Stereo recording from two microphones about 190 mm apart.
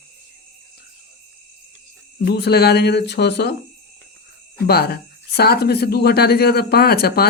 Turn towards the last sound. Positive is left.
turn(degrees=55)  # may be behind; listen again after turning